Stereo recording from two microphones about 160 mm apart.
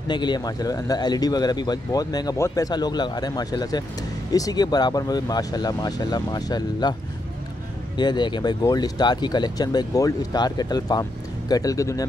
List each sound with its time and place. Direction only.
0.1 s speech: 25° left (ahead or behind)
8.0 s speech: 25° left (ahead or behind)